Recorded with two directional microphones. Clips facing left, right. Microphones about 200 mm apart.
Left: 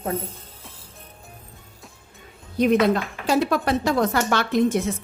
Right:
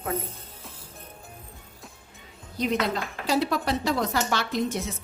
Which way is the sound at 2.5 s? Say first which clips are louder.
Left 8 dB; 55° left (ahead or behind).